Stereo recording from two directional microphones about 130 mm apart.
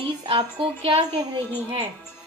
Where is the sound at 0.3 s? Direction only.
45° right (ahead or behind).